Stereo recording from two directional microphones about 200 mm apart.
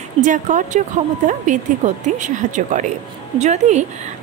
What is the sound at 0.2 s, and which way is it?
A woman's voice, 40° right (ahead or behind).